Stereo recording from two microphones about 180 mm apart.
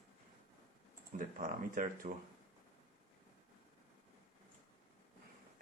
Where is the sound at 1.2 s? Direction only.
50° right (ahead or behind).